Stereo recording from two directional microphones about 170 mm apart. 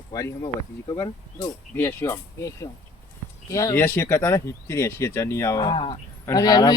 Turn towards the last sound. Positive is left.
turn(degrees=20)  # may be behind; listen again after turning